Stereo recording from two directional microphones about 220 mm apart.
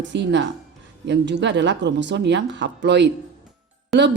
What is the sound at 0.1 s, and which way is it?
A woman's voice, 55° right (ahead or behind).